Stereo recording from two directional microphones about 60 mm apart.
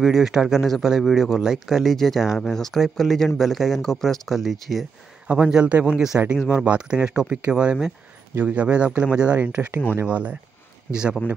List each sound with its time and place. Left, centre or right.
0.0 s speech: centre
5.3 s speech: centre
10.9 s speech: centre